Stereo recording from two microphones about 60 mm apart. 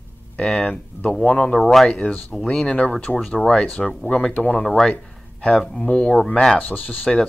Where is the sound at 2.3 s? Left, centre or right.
Centre.